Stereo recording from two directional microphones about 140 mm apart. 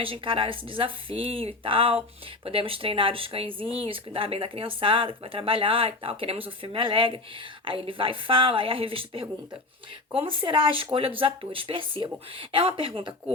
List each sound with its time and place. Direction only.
0.0 s speech: 40° right (ahead or behind)